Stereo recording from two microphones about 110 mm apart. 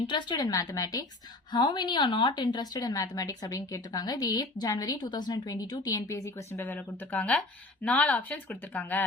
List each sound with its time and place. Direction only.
0.1 s a woman's voice: 40° left (ahead or behind); by 9.0 s 15° left (ahead or behind)